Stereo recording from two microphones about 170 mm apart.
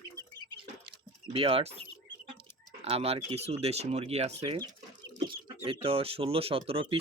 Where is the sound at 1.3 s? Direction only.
35° right (ahead or behind).